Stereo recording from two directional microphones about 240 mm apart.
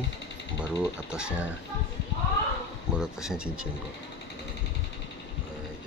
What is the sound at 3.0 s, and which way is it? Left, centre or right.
Speech, centre.